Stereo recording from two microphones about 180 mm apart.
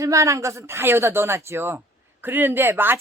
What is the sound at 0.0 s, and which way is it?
A man's voice, 15° right (ahead or behind).